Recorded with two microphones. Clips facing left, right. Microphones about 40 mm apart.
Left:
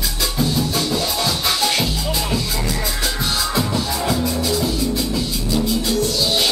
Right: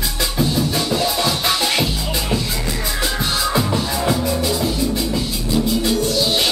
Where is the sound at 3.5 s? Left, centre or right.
Centre.